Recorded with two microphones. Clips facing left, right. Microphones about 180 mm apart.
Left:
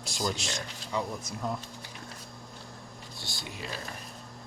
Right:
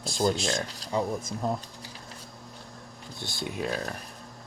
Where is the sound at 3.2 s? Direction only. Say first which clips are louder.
Right 9 dB; 55° right (ahead or behind).